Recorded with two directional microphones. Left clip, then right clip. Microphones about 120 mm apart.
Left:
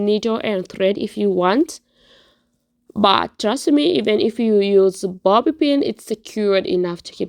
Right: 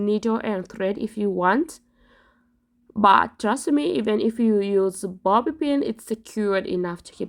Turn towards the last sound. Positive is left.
turn(degrees=15)  # may be behind; listen again after turning